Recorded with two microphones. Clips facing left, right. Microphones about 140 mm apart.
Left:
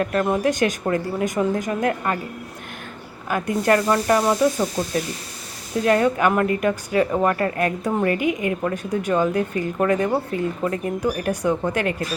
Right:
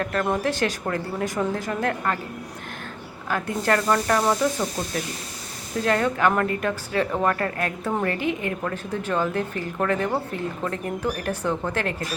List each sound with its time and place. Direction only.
0.0 s speech: 20° left (ahead or behind)
3.2 s speech: 15° left (ahead or behind)
5.8 s speech: 20° left (ahead or behind)